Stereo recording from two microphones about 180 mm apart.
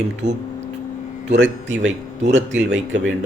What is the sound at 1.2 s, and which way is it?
A man's voice, 85° right.